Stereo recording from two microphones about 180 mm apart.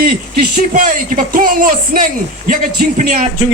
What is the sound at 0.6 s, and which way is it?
Speech, 45° right (ahead or behind).